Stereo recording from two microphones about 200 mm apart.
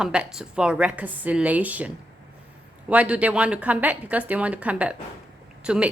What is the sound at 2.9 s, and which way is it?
Speech, 5° right (ahead or behind).